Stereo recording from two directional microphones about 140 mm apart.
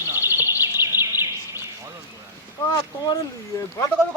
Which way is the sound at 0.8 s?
15° right (ahead or behind).